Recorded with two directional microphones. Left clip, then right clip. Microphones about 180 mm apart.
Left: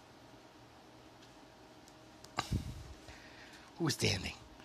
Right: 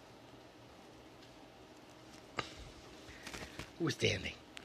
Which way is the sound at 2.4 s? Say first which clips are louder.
Left 2 dB; 50° left (ahead or behind).